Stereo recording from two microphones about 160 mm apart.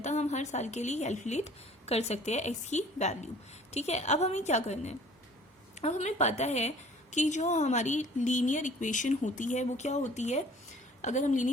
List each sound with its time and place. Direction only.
0.0 s speech: 45° left (ahead or behind)